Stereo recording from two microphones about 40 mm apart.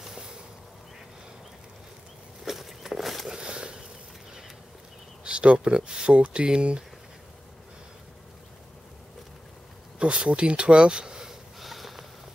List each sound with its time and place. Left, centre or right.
0.0 s boat: centre
2.4 s walk: centre
3.3 s a sound: right
5.2 s speech: right
9.9 s speech: right
11.6 s sniff: centre